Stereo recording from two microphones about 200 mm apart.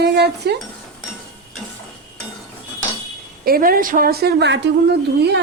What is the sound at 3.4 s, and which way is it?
A woman's voice, 50° right (ahead or behind).